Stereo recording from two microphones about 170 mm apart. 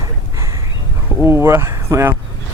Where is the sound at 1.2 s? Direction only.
15° right (ahead or behind).